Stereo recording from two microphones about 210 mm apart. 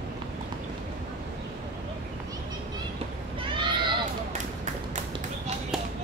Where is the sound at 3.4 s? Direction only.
25° right (ahead or behind).